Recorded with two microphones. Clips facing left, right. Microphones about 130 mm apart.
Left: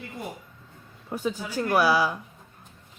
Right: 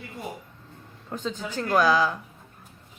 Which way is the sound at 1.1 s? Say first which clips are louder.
Left 2 dB; 10° left (ahead or behind).